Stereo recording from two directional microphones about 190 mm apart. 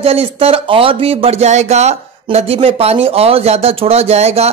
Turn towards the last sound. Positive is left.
turn(degrees=-35)  # may be behind; listen again after turning